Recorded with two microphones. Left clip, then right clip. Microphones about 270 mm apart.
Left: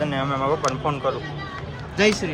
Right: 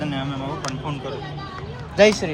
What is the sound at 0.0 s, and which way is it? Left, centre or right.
Speech, centre.